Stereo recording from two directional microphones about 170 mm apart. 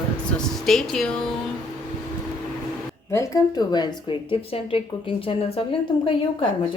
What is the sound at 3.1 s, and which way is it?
Speech, 20° left (ahead or behind).